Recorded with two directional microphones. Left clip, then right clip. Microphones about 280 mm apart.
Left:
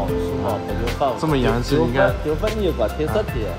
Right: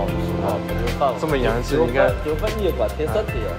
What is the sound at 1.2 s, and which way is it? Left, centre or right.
Speech, centre.